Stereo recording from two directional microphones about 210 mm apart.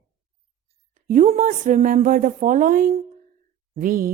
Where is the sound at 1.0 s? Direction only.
35° right (ahead or behind).